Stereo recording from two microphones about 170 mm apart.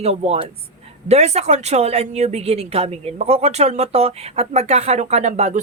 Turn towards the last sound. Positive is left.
turn(degrees=-45)  # may be behind; listen again after turning